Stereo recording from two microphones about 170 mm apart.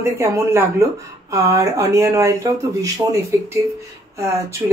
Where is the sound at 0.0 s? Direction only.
15° right (ahead or behind).